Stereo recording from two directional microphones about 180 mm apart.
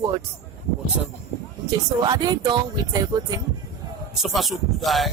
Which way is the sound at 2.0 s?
20° right (ahead or behind).